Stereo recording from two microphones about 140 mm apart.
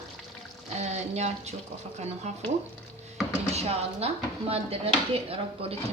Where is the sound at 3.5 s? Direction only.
45° right (ahead or behind).